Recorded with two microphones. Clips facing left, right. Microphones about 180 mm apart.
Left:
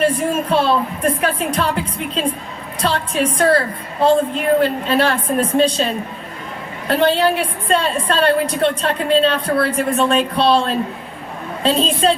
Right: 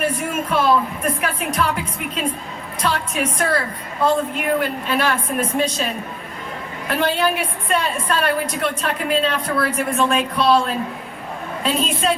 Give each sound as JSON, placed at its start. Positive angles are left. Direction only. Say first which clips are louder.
{"t": 0.2, "sound": "a woman's voice", "louder": "left 4 dB", "side_deg": 30}